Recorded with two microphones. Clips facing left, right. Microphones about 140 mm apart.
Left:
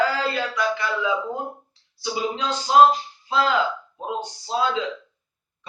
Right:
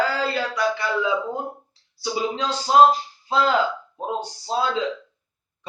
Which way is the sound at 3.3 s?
35° right (ahead or behind).